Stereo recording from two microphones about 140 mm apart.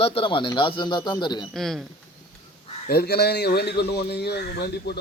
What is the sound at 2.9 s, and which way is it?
Speech, 90° left.